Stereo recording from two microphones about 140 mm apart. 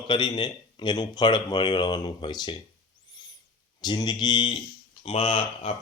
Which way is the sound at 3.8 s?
30° left (ahead or behind).